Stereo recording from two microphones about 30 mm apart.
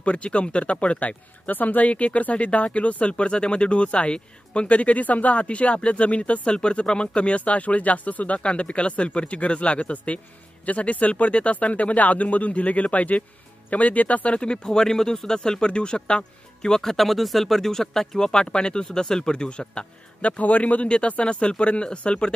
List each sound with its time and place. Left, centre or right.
0.0 s a man's voice: left
1.5 s speech: left
1.9 s a man's voice: left
5.4 s a man's voice: left
6.5 s a man's voice: left
8.4 s a man's voice: left
14.4 s speech: left
15.6 s speech: left
16.8 s speech: centre
17.6 s speech: centre
20.2 s a man's voice: left
20.8 s speech: left